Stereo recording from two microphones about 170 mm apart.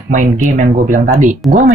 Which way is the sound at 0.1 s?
45° right (ahead or behind).